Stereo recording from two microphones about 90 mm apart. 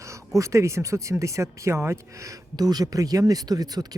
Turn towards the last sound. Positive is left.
turn(degrees=-45)  # may be behind; listen again after turning